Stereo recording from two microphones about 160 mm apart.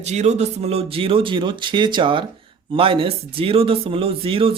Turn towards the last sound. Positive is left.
turn(degrees=-35)  # may be behind; listen again after turning